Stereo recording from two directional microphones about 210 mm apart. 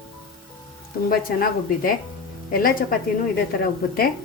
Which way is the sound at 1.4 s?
40° left (ahead or behind).